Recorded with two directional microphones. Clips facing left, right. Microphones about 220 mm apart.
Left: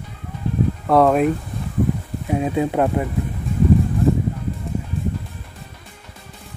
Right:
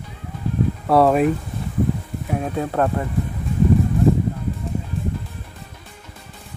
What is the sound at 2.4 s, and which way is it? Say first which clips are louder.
Speech: left 3 dB; 15° left (ahead or behind).